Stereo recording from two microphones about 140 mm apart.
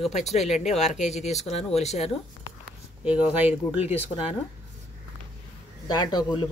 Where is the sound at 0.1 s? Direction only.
50° left (ahead or behind).